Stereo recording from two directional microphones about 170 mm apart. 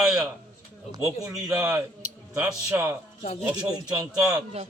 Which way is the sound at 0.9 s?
15° right (ahead or behind).